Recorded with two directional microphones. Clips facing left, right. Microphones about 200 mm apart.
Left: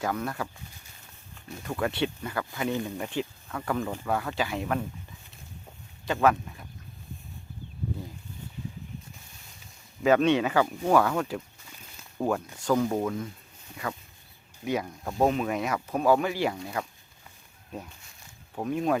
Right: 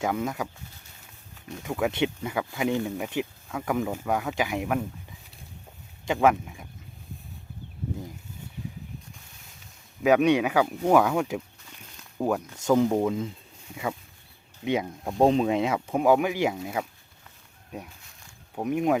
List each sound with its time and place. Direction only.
0.0 s speech: 15° right (ahead or behind)
1.6 s speech: 10° right (ahead or behind)
6.2 s speech: 15° right (ahead or behind)
10.0 s speech: 15° right (ahead or behind)
12.5 s speech: 20° right (ahead or behind)
14.6 s speech: 20° right (ahead or behind)